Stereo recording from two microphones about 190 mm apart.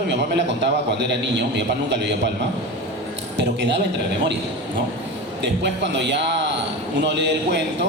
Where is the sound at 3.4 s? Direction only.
65° right (ahead or behind).